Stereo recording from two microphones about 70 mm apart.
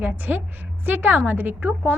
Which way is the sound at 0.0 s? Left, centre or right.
Right.